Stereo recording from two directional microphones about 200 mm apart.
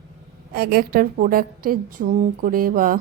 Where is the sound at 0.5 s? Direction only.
50° right (ahead or behind).